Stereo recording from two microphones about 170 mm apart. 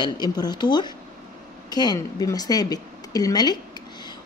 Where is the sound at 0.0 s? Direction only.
25° left (ahead or behind).